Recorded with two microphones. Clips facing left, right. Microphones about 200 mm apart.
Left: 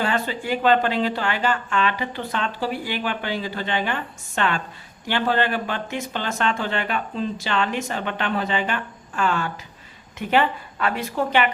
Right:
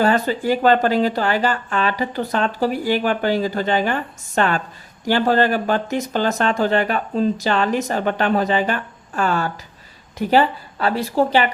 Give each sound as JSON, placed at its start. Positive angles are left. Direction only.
{"t": 0.0, "sound": "speech", "side_deg": -40}